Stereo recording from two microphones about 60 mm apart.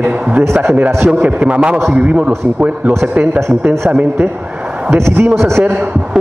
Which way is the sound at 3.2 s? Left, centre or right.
Right.